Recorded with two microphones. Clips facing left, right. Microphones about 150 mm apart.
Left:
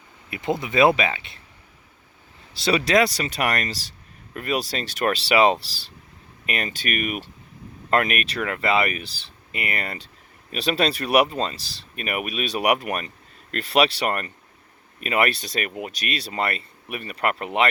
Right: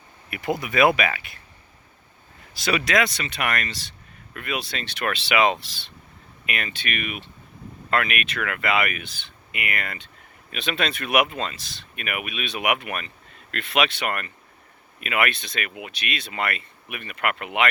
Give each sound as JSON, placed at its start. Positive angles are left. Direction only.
{"t": 0.3, "sound": "speech", "side_deg": 25}
{"t": 2.6, "sound": "speech", "side_deg": 30}